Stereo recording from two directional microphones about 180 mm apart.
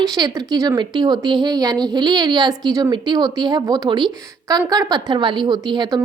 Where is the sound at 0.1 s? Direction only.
20° right (ahead or behind).